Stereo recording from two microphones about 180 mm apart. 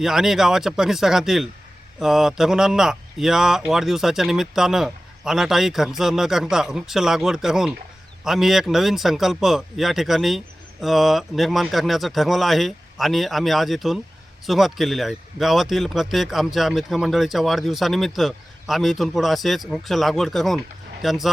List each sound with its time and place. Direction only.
0.0 s a man's voice: centre (ahead or behind)